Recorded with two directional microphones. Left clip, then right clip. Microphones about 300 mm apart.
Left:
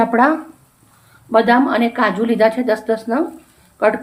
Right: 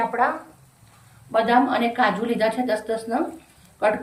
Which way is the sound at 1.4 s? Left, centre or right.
Centre.